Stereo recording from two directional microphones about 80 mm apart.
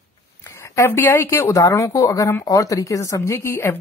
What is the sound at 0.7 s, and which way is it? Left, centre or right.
Speech, left.